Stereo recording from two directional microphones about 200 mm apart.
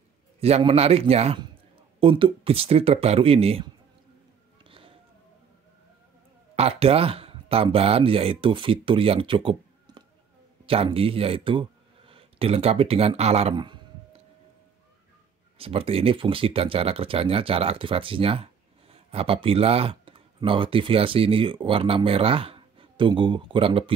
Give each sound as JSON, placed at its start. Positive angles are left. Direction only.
{"t": 0.4, "sound": "a man's voice", "side_deg": -30}
{"t": 4.6, "sound": "a sound", "side_deg": -25}
{"t": 6.5, "sound": "speech", "side_deg": -30}
{"t": 15.5, "sound": "speech", "side_deg": -30}